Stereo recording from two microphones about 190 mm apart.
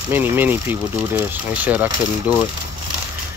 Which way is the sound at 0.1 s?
10° right (ahead or behind).